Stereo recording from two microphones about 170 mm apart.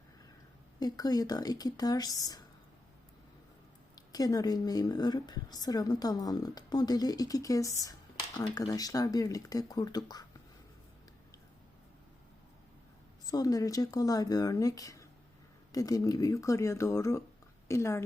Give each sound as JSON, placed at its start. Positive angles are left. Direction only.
{"t": 0.8, "sound": "a woman's voice", "side_deg": 20}
{"t": 3.9, "sound": "a woman's voice", "side_deg": 20}
{"t": 13.2, "sound": "a woman's voice", "side_deg": 20}